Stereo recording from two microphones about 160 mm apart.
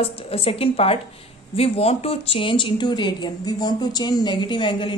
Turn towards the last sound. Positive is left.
turn(degrees=30)  # may be behind; listen again after turning